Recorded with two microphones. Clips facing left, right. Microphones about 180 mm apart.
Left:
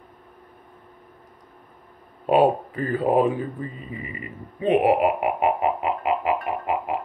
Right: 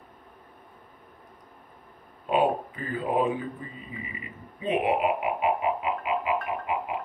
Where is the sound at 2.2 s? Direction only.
50° left (ahead or behind).